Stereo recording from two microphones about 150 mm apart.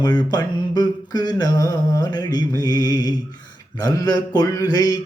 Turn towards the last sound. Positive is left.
turn(degrees=25)  # may be behind; listen again after turning